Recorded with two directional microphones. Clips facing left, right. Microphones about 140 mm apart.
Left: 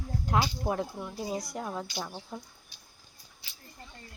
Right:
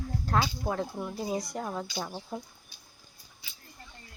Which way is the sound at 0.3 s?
15° left (ahead or behind).